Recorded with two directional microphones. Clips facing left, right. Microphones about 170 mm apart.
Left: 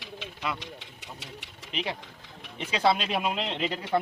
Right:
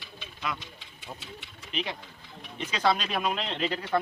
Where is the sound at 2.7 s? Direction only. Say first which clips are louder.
Left 2 dB; 30° left (ahead or behind).